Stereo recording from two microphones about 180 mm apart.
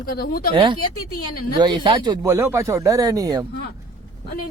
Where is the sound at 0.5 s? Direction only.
25° right (ahead or behind).